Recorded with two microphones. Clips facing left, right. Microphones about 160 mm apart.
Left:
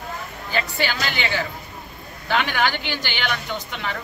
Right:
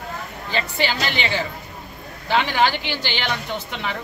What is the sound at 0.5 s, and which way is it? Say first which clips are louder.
A man's voice: right 1 dB; 20° right (ahead or behind).